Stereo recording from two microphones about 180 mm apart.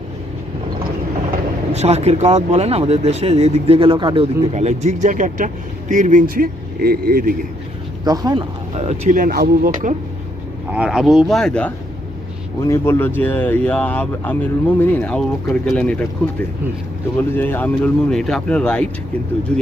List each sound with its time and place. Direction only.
1.7 s speech: 35° right (ahead or behind)
4.5 s speech: 40° right (ahead or behind)
8.0 s speech: 20° right (ahead or behind)
8.7 s speech: 40° right (ahead or behind); by 9.9 s 55° right (ahead or behind)
10.7 s speech: 5° right (ahead or behind)
12.6 s speech: 15° left (ahead or behind)
17.2 s speech: 10° left (ahead or behind)